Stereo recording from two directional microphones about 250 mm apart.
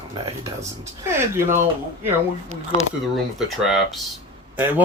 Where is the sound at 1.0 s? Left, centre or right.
Centre.